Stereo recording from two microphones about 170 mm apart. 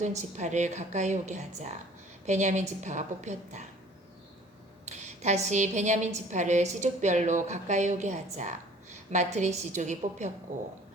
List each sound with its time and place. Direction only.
0.0 s a woman's voice: 45° right (ahead or behind)
4.9 s a woman's voice: 45° right (ahead or behind)